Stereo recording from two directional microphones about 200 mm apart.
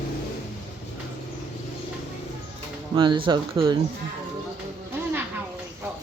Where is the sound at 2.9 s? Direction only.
25° right (ahead or behind).